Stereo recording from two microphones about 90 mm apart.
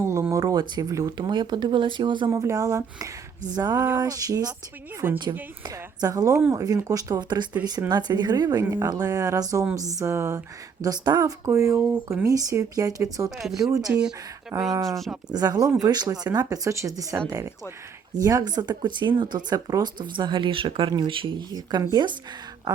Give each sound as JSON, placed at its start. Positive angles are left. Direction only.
{"t": 0.0, "sound": "a sound", "side_deg": -35}
{"t": 0.8, "sound": "speech", "side_deg": -45}
{"t": 2.3, "sound": "speech", "side_deg": -40}
{"t": 5.0, "sound": "speech", "side_deg": -25}
{"t": 5.6, "sound": "speech", "side_deg": -45}
{"t": 10.8, "sound": "speech", "side_deg": -45}
{"t": 13.3, "sound": "speech", "side_deg": -5}
{"t": 13.6, "sound": "speech", "side_deg": -35}
{"t": 13.8, "sound": "speech", "side_deg": -10}
{"t": 14.5, "sound": "speech", "side_deg": -40}
{"t": 14.8, "sound": "speech", "side_deg": 0}
{"t": 15.3, "sound": "speech", "side_deg": -45}
{"t": 21.5, "sound": "speech", "side_deg": -45}